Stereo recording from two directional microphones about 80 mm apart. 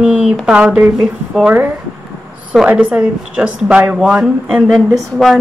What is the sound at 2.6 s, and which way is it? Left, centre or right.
A woman's voice, centre.